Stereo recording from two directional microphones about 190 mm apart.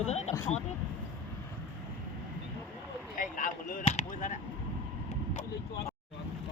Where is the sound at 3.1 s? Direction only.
45° left (ahead or behind).